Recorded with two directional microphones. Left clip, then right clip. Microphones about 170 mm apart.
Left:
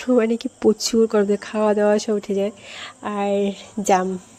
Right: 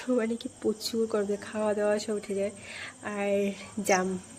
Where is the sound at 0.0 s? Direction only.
40° left (ahead or behind).